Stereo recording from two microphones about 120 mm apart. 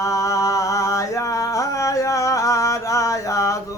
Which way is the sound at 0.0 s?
25° left (ahead or behind).